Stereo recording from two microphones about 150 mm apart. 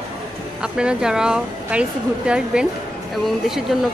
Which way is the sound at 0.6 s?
5° right (ahead or behind).